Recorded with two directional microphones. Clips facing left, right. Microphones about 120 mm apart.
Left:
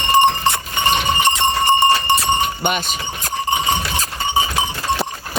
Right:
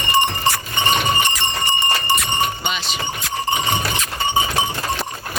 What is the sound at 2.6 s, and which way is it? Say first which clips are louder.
Speech: left 3 dB; 50° left (ahead or behind).